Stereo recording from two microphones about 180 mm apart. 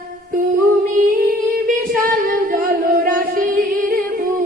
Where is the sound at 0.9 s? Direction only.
50° right (ahead or behind).